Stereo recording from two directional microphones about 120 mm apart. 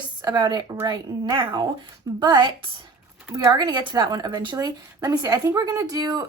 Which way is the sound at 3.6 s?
40° right (ahead or behind).